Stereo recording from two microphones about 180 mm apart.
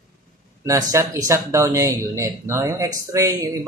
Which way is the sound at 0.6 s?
15° right (ahead or behind).